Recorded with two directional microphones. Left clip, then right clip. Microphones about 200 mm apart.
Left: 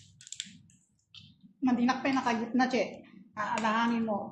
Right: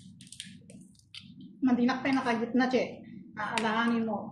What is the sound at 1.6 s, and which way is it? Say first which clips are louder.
A woman's voice: right 1 dB; 35° left (ahead or behind).